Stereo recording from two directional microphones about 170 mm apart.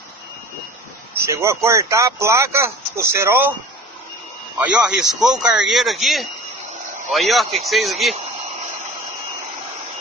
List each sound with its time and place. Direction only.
1.1 s speech: 15° right (ahead or behind)
4.6 s speech: 5° right (ahead or behind)